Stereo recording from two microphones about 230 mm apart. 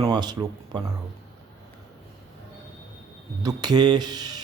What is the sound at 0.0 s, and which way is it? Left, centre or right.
Speech, centre.